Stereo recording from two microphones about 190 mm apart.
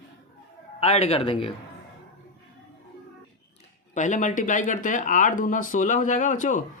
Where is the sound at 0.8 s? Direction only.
30° left (ahead or behind).